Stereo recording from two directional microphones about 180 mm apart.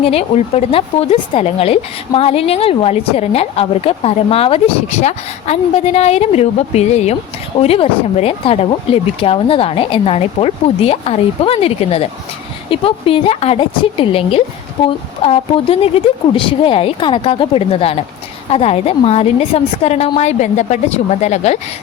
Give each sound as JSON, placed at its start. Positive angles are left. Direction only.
{"t": 0.0, "sound": "a woman's voice", "side_deg": 35}